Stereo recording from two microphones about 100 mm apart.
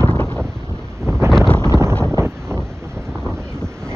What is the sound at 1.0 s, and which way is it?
Wind noise, 25° right (ahead or behind).